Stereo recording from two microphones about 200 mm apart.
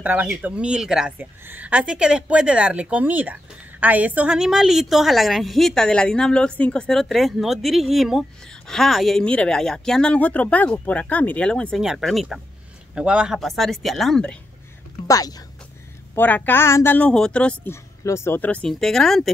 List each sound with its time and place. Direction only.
0.0 s speech: 10° right (ahead or behind)
15.0 s speech: 20° left (ahead or behind); by 19.3 s centre (ahead or behind)